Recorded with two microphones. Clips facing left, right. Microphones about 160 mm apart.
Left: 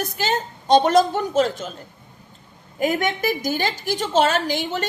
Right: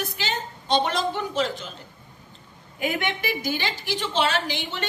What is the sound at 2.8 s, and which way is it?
A woman's voice, 40° left (ahead or behind).